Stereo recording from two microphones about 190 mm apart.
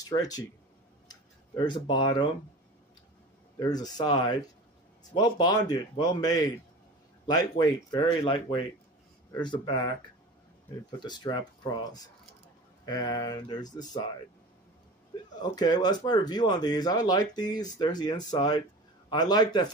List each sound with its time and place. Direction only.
0.0 s speech: 20° left (ahead or behind)
1.0 s tick-tock: 20° left (ahead or behind)
3.5 s speech: 20° left (ahead or behind)
11.0 s speech: 25° left (ahead or behind)
15.4 s speech: 20° left (ahead or behind)